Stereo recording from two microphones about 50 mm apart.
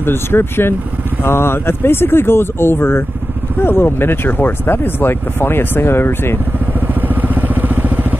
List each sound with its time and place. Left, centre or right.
0.0 s speech: left
6.9 s vehicle: right